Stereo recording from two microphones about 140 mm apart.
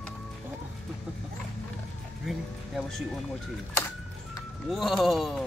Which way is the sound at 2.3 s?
Centre (ahead or behind).